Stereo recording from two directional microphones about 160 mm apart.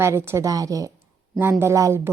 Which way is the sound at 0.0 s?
15° right (ahead or behind).